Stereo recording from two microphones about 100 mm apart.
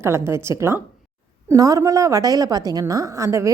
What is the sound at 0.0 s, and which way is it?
A woman's voice, 25° right (ahead or behind).